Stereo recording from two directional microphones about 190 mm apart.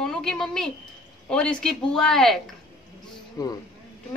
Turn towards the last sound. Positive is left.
turn(degrees=20)  # may be behind; listen again after turning